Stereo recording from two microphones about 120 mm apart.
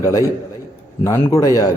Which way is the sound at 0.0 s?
25° left (ahead or behind).